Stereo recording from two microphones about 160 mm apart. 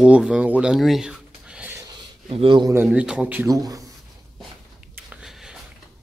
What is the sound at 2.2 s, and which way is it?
Speech, 35° right (ahead or behind).